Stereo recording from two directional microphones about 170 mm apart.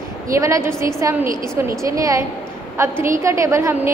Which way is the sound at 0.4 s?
15° right (ahead or behind).